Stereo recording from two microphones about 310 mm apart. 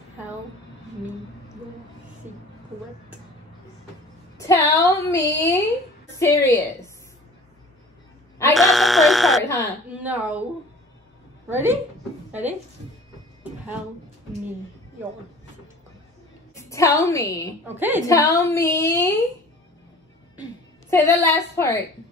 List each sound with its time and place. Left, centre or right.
2.3 s a woman's voice: right
4.4 s a woman's voice: centre
8.4 s a sound: centre
10.0 s speech: centre
11.4 s a woman's voice: centre
16.5 s a woman's voice: centre
17.7 s a woman's voice: centre
18.0 s a woman's voice: centre
20.9 s a woman's voice: centre